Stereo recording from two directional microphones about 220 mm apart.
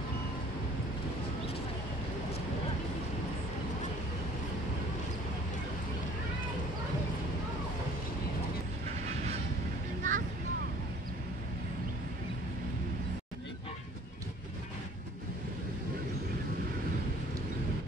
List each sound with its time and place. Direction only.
10.0 s vehicle: 35° right (ahead or behind)